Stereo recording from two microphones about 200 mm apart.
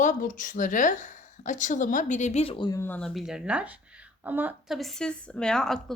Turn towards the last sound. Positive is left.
turn(degrees=0)  # may be behind; listen again after turning